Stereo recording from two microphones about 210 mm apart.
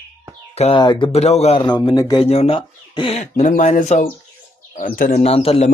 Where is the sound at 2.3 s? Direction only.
30° left (ahead or behind).